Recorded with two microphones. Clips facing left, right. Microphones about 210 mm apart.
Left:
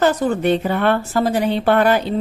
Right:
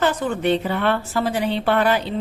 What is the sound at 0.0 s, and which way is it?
A woman's voice, 40° left (ahead or behind).